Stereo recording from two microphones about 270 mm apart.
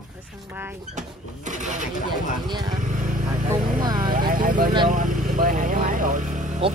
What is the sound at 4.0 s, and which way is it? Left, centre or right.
Speech, right.